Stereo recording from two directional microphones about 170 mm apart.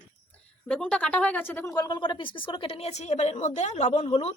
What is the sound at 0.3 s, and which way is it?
A woman's voice, 5° left (ahead or behind).